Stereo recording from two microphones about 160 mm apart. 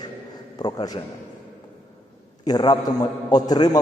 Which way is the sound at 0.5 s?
25° left (ahead or behind).